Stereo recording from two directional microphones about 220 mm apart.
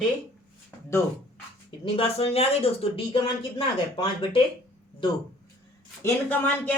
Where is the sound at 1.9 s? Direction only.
25° left (ahead or behind).